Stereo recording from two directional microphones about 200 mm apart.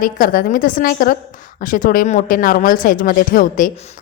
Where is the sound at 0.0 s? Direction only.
45° left (ahead or behind).